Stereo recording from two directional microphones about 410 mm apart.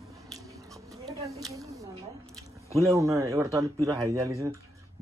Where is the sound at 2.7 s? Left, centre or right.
Centre.